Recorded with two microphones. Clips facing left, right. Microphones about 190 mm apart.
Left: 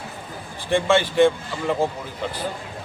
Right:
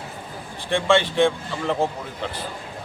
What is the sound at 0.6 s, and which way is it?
Speech, 5° left (ahead or behind).